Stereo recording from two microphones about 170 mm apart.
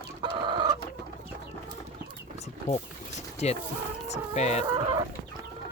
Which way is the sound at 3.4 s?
40° left (ahead or behind).